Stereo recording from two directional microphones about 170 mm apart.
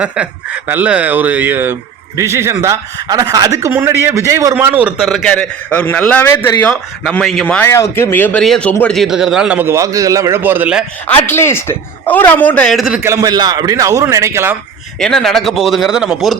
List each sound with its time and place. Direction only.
0.7 s a man's voice: 10° right (ahead or behind)
11.1 s a man's voice: 15° left (ahead or behind)
13.0 s a man's voice: 20° right (ahead or behind)
15.0 s speech: centre (ahead or behind)